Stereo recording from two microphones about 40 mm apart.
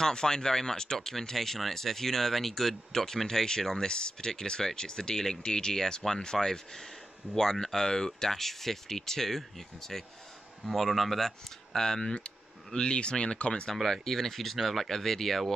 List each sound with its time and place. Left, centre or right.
0.0 s speech: centre
13.8 s speech: centre